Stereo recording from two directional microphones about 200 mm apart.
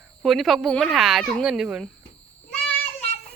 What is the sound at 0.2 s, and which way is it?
Speech, centre (ahead or behind).